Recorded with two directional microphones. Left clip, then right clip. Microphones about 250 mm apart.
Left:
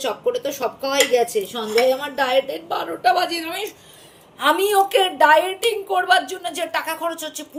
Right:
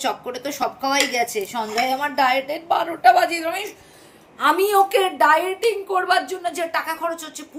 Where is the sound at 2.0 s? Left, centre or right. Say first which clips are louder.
Right 1 dB; right.